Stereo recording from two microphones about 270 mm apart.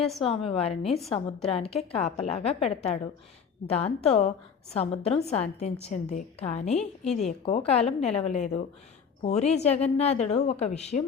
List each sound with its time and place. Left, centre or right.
0.0 s a woman's voice: centre
0.3 s a woman's voice: left
0.9 s a woman's voice: centre
1.5 s a woman's voice: left